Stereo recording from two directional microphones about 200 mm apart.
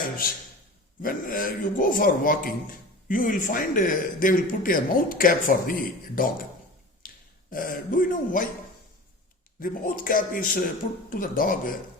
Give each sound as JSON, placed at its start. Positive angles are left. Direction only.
{"t": 1.0, "sound": "a man's voice", "side_deg": 45}
{"t": 7.5, "sound": "a man's voice", "side_deg": 45}
{"t": 9.6, "sound": "a man's voice", "side_deg": 45}